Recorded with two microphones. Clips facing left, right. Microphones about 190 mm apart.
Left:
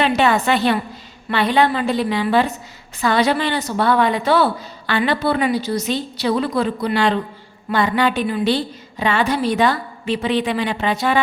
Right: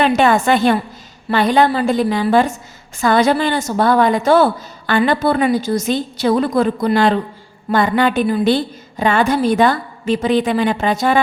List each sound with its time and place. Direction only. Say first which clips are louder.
0.0 s a woman's voice: right 3 dB; 45° right (ahead or behind)